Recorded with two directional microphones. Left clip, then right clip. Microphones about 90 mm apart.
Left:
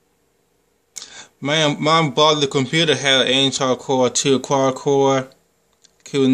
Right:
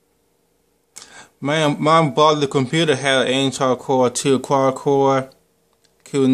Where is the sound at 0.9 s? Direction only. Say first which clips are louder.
Left 4 dB; 15° right (ahead or behind).